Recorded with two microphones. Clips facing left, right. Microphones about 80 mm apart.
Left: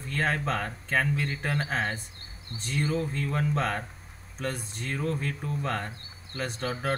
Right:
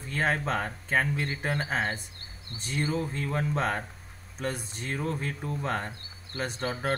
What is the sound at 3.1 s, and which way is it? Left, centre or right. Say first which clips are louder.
Speech: left 1 dB; right.